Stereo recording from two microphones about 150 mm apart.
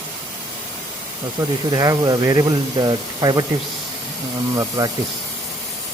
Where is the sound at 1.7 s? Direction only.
25° right (ahead or behind).